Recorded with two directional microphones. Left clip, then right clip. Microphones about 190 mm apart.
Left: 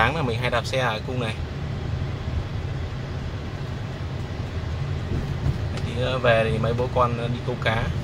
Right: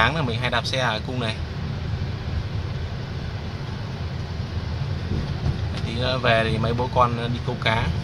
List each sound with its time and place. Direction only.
0.0 s speech: 5° right (ahead or behind)
6.0 s speech: 15° right (ahead or behind)